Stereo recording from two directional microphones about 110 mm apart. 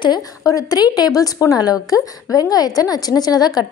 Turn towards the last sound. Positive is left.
turn(degrees=35)  # may be behind; listen again after turning